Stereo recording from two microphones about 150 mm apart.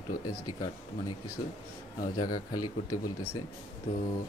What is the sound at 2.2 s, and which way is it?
Speech, 25° left (ahead or behind).